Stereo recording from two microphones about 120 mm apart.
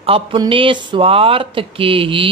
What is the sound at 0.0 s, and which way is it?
Speech, 50° right (ahead or behind).